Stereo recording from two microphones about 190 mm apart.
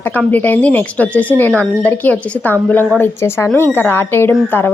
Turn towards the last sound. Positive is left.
turn(degrees=10)  # may be behind; listen again after turning